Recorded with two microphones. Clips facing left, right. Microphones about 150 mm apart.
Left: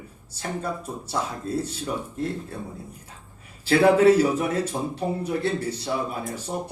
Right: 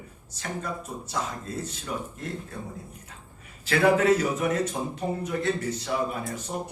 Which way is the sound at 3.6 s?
30° left (ahead or behind).